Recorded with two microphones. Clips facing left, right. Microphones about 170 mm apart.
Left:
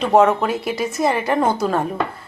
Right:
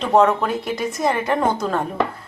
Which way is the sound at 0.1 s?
5° left (ahead or behind).